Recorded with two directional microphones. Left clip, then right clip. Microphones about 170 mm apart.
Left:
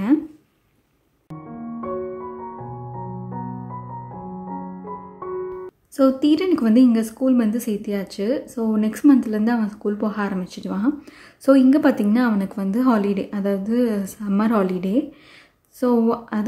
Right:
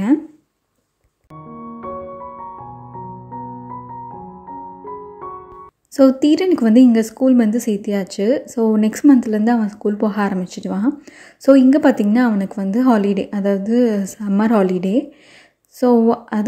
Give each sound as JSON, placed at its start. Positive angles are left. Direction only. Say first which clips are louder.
{"t": 5.9, "sound": "a woman's voice", "louder": "right 4 dB", "side_deg": -20}